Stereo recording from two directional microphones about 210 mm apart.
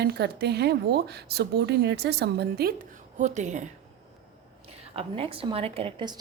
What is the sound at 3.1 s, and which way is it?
Speech, 35° right (ahead or behind).